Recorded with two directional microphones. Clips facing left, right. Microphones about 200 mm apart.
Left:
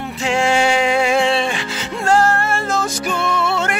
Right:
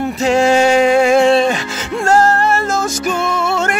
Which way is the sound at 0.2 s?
40° right (ahead or behind).